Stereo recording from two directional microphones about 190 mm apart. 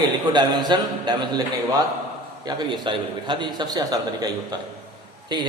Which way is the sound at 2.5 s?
25° right (ahead or behind).